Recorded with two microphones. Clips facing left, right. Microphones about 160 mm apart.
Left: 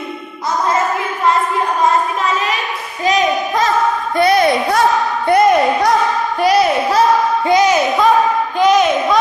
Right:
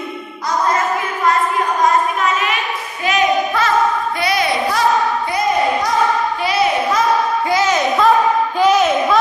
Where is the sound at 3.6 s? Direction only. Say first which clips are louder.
Left 1 dB; 45° left (ahead or behind).